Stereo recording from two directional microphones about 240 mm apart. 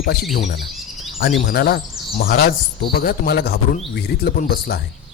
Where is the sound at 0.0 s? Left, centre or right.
Left.